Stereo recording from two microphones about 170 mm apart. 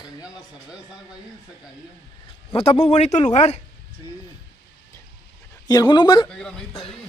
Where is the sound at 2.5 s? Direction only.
35° left (ahead or behind).